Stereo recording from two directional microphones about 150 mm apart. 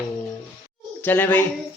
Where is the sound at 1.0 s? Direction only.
15° left (ahead or behind).